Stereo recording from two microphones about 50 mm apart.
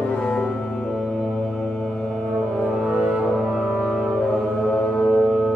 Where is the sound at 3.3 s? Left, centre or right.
Centre.